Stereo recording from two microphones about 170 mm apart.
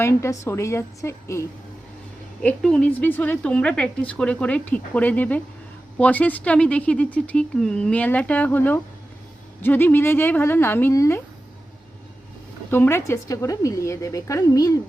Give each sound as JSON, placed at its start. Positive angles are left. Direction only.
{"t": 0.0, "sound": "a woman's voice", "side_deg": 15}
{"t": 12.7, "sound": "a woman's voice", "side_deg": 15}